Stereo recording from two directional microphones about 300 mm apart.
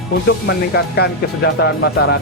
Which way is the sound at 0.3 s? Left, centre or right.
Left.